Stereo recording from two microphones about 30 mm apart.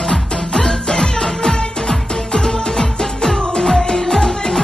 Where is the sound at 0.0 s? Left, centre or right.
Centre.